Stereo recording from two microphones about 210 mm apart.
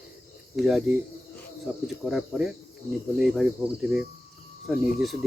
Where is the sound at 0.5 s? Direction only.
Centre (ahead or behind).